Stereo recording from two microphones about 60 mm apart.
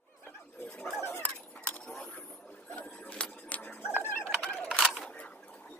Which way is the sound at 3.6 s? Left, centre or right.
Left.